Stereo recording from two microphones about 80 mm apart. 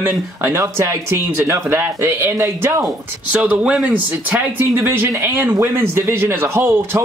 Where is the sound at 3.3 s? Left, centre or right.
Centre.